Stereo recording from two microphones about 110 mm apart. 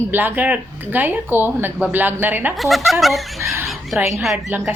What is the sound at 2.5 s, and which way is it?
Speech, centre (ahead or behind).